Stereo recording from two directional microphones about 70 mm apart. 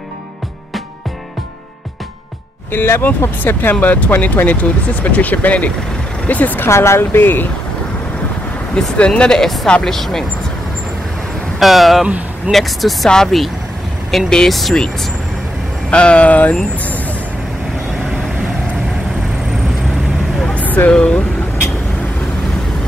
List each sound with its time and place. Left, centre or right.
2.7 s speech: left
6.7 s speech: left
8.9 s speech: centre
11.6 s speech: centre
15.9 s speech: centre
20.5 s vehicle: left